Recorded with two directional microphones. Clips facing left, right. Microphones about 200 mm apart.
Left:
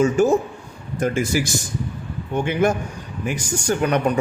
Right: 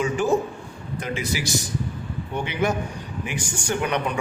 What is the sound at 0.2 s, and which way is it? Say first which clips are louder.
Speech: left 4 dB; 45° left (ahead or behind).